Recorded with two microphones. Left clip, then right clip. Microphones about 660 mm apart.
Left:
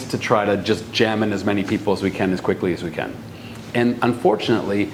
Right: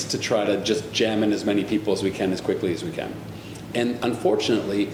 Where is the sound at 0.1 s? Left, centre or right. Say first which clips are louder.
Left 4 dB; left.